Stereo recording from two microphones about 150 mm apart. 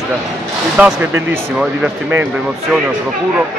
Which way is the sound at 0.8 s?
10° right (ahead or behind).